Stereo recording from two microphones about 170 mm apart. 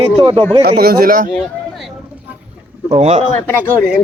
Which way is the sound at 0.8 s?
55° right (ahead or behind).